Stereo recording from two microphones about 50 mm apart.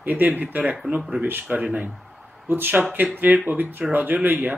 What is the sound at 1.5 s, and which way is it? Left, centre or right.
Speech, right.